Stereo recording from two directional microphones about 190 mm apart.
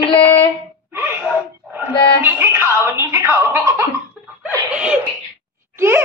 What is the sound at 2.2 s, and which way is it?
Music, 10° right (ahead or behind).